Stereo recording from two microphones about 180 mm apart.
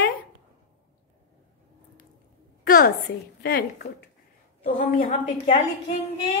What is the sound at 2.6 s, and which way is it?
A woman's voice, 55° left (ahead or behind).